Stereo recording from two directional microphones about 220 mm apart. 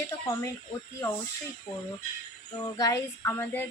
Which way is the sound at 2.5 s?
15° left (ahead or behind).